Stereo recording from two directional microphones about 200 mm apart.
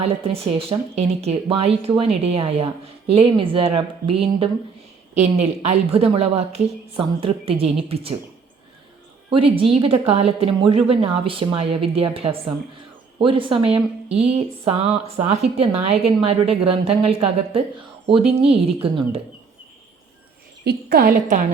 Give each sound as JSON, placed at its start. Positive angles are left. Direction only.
{"t": 0.7, "sound": "speech", "side_deg": -30}
{"t": 9.3, "sound": "a woman's voice", "side_deg": -25}
{"t": 20.7, "sound": "a woman's voice", "side_deg": -50}